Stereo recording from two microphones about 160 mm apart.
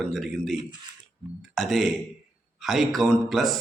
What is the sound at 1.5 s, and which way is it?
A man's voice, centre (ahead or behind).